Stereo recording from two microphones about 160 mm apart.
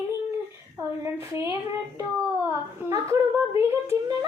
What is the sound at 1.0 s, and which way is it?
Speech, 20° right (ahead or behind).